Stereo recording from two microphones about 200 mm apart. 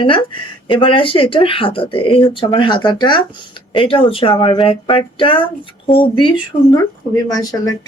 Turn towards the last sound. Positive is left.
turn(degrees=20)  # may be behind; listen again after turning